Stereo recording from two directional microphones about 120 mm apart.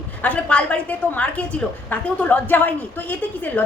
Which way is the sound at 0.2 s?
10° left (ahead or behind).